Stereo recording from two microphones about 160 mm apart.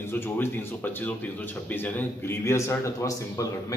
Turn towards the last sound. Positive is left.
turn(degrees=20)  # may be behind; listen again after turning